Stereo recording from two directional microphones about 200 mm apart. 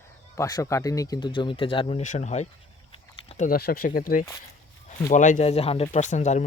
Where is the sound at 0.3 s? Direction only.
15° left (ahead or behind).